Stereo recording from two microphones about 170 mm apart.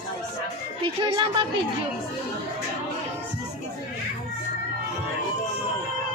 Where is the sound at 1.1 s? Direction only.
30° right (ahead or behind).